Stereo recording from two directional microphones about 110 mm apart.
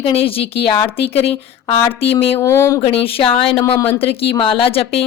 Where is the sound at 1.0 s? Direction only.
65° left (ahead or behind).